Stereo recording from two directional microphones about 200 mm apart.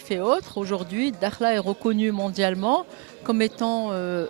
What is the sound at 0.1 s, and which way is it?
Speech, 5° right (ahead or behind).